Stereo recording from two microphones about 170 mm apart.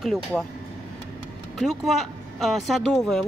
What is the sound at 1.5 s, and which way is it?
Speech, centre (ahead or behind).